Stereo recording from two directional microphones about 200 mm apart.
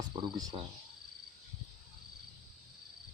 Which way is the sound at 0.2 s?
25° right (ahead or behind).